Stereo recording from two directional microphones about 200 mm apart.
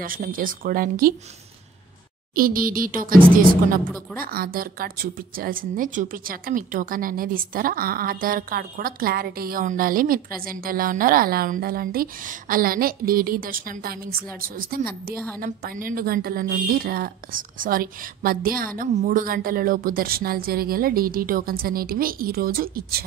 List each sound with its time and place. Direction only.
0.0 s speech: 45° right (ahead or behind)
2.3 s speech: 45° right (ahead or behind)
4.2 s speech: 45° right (ahead or behind)